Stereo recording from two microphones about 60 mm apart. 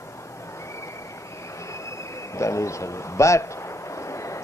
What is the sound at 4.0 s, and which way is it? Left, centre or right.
Vehicle, left.